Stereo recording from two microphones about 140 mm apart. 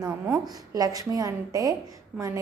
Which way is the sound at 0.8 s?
25° right (ahead or behind).